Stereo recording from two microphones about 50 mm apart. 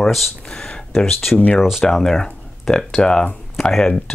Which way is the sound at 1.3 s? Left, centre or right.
Left.